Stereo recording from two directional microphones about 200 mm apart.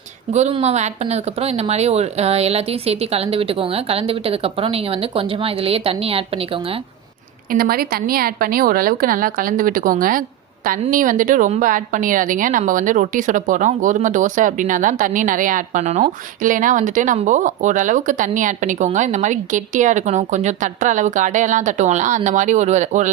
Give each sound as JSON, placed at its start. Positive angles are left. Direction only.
{"t": 0.3, "sound": "speech", "side_deg": -30}
{"t": 7.5, "sound": "a woman's voice", "side_deg": -50}